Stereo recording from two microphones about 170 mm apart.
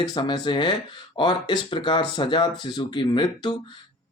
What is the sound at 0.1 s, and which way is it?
Speech, 25° left (ahead or behind).